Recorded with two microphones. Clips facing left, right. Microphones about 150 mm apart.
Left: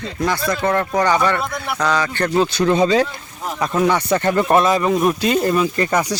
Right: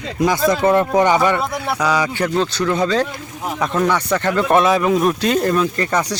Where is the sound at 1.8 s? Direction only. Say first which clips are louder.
Even; 10° right (ahead or behind).